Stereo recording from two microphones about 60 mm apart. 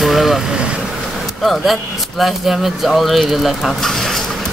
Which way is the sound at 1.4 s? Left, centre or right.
Centre.